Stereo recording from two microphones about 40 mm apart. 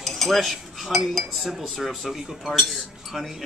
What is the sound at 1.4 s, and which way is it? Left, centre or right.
Speech, centre.